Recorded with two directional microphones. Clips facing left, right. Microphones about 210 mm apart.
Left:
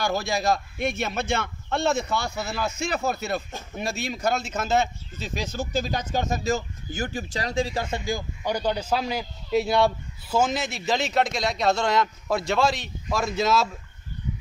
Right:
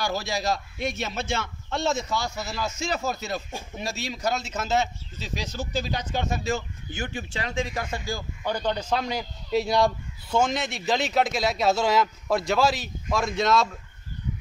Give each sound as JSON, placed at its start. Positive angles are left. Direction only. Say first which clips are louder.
{"t": 0.0, "sound": "a man's voice", "louder": "left 3 dB", "side_deg": 50}